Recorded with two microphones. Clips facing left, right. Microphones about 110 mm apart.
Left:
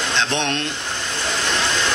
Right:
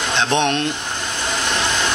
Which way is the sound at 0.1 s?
15° right (ahead or behind).